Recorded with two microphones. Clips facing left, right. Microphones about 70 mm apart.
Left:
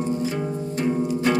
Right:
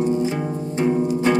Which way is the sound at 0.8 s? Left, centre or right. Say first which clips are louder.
Right 4 dB; right.